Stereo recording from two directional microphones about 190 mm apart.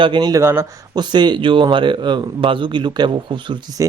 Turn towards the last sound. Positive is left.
turn(degrees=-15)  # may be behind; listen again after turning